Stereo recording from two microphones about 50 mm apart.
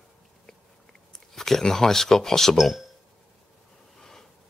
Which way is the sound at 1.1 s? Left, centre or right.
Centre.